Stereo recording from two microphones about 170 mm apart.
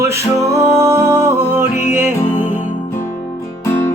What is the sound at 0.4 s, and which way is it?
Music, 15° right (ahead or behind).